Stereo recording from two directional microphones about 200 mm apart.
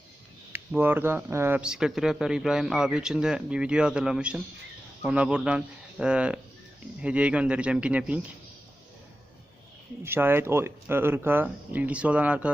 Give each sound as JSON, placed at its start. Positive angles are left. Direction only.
{"t": 0.5, "sound": "speech", "side_deg": -10}
{"t": 10.0, "sound": "speech", "side_deg": -10}